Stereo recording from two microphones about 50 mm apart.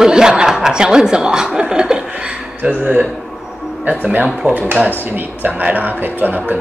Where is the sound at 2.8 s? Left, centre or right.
Right.